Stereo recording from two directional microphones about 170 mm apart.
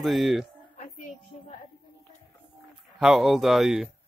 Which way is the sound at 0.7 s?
50° left (ahead or behind).